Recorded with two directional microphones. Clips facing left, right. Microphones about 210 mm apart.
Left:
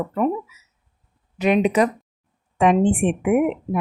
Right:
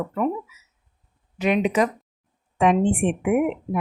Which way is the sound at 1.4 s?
35° left (ahead or behind).